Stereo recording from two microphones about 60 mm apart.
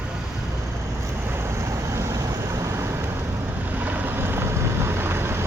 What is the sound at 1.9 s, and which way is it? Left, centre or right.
Vehicle, right.